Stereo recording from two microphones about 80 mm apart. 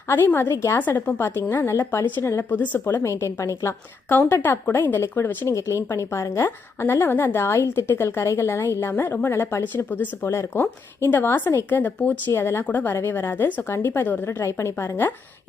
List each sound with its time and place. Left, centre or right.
0.8 s a woman's voice: left
12.3 s a woman's voice: left
12.6 s a woman's voice: left